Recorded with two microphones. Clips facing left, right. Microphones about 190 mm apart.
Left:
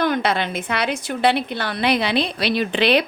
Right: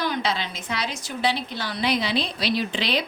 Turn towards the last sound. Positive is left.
turn(degrees=65)  # may be behind; listen again after turning